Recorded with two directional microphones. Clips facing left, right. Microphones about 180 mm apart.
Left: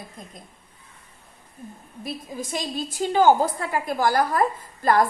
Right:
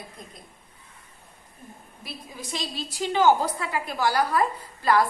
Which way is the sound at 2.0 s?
50° left (ahead or behind).